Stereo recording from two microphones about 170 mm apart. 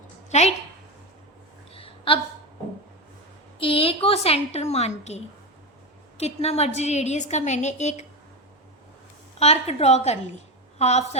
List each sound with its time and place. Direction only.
0.3 s a woman's voice: 40° left (ahead or behind)
1.7 s a sound: 35° left (ahead or behind)
3.6 s a woman's voice: 35° left (ahead or behind)
9.4 s a woman's voice: 40° left (ahead or behind)